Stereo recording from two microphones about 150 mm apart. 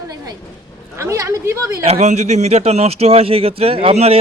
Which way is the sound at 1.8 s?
45° right (ahead or behind).